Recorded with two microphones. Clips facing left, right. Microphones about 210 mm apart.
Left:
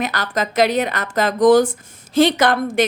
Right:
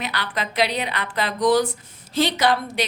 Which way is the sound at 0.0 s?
45° left (ahead or behind).